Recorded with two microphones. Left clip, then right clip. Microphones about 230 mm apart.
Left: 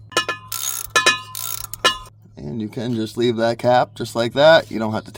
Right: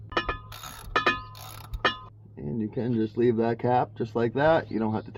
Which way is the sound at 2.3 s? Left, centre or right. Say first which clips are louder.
Left 3 dB; left.